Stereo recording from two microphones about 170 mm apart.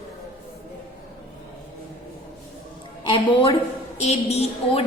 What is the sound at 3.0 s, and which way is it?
Speech, 30° left (ahead or behind).